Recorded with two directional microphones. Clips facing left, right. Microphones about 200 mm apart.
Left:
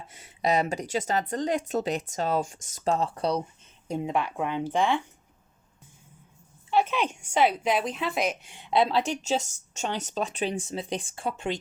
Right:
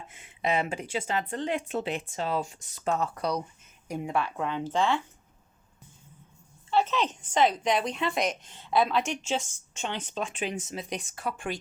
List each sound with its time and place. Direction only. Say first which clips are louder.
0.1 s a woman's voice: left 3 dB; 40° left (ahead or behind); by 5.0 s 15° left (ahead or behind)
6.7 s a woman's voice: left 1 dB; 10° left (ahead or behind)